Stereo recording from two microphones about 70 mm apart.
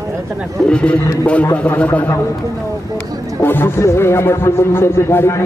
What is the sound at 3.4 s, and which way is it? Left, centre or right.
A man's voice, left.